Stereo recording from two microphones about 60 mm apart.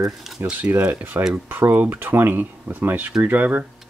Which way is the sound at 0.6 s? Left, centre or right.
Right.